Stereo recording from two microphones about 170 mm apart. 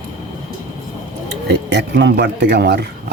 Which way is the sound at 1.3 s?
85° right.